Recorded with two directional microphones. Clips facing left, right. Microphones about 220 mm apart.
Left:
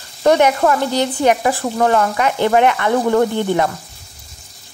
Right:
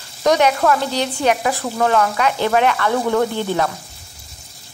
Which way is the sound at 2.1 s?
15° left (ahead or behind).